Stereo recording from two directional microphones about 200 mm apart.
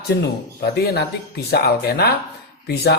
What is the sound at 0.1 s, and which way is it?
Speech, 55° left (ahead or behind).